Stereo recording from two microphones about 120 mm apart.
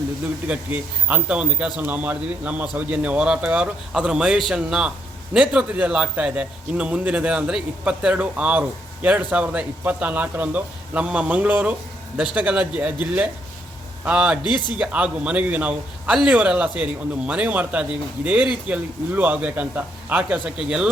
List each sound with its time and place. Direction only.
0.4 s a man's voice: 10° right (ahead or behind)